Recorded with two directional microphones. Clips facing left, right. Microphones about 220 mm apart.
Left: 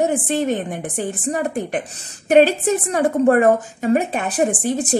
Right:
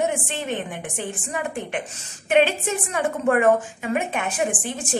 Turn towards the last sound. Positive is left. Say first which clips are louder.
# left 7 dB
turn(degrees=40)  # may be behind; listen again after turning